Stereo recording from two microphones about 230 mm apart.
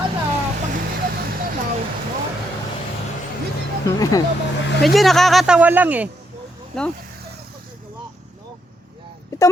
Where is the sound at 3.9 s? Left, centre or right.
Centre.